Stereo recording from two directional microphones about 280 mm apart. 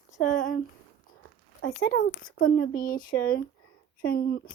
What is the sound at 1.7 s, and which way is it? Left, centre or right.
Speech, left.